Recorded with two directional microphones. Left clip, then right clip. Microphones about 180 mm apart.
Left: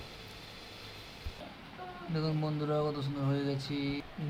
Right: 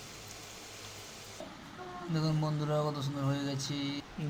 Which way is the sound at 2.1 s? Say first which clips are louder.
Even; 15° right (ahead or behind).